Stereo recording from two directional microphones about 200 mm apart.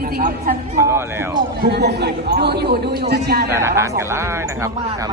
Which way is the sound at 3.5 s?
15° right (ahead or behind).